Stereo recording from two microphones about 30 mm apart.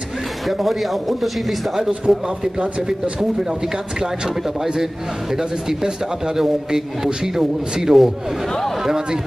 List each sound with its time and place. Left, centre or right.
0.5 s speech: centre
2.1 s a man's voice: centre
5.7 s a man's voice: centre